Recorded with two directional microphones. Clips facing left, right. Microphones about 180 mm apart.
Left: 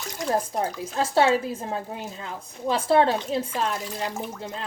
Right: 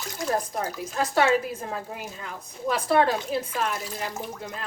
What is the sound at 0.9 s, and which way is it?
A woman's voice, 30° left (ahead or behind).